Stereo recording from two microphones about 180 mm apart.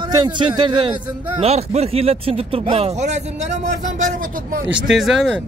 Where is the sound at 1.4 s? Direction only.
35° right (ahead or behind).